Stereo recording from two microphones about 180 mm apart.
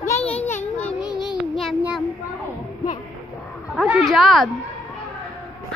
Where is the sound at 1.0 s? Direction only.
5° right (ahead or behind).